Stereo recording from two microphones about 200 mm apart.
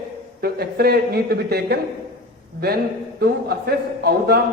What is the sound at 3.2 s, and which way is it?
Speech, 50° right (ahead or behind).